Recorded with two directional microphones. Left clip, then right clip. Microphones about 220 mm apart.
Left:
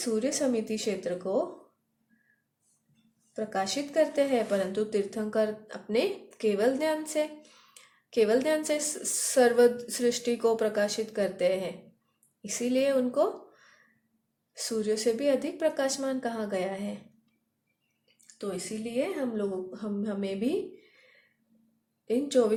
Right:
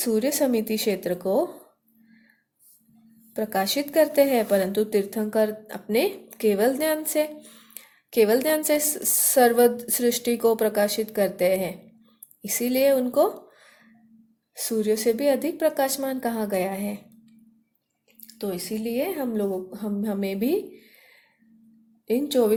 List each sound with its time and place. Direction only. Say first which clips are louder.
0.0 s a woman's voice: right 5 dB; 30° right (ahead or behind)
3.3 s a woman's voice: right 6 dB; 30° right (ahead or behind)
18.3 s a woman's voice: right 5 dB; 30° right (ahead or behind)
22.0 s a woman's voice: right 4 dB; 25° right (ahead or behind)